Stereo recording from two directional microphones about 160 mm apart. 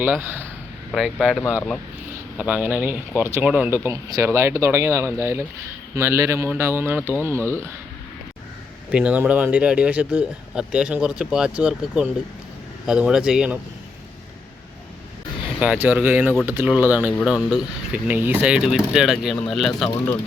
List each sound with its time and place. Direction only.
0.0 s speech: 10° right (ahead or behind)
0.9 s speech: centre (ahead or behind)
2.4 s speech: 10° right (ahead or behind)
8.9 s speech: 5° right (ahead or behind)
15.6 s speech: 10° right (ahead or behind)